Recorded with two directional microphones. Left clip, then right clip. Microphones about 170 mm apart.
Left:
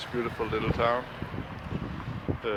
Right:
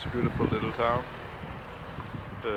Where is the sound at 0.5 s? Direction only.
15° left (ahead or behind).